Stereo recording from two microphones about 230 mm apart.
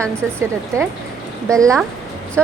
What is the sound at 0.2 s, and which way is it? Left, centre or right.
A woman's voice, centre.